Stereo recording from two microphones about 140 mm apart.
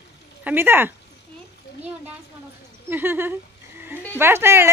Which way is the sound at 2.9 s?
15° right (ahead or behind).